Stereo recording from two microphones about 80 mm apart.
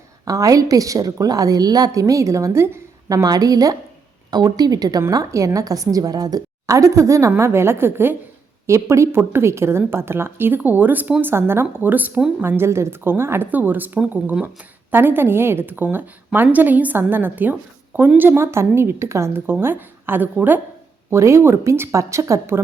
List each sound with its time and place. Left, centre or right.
0.3 s a woman's voice: right
3.1 s a woman's voice: right
21.1 s a woman's voice: right